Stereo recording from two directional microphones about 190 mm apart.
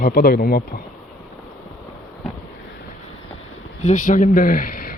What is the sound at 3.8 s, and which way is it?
Speech, 40° left (ahead or behind).